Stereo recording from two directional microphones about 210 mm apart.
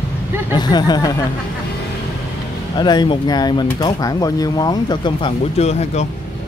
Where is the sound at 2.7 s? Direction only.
20° left (ahead or behind).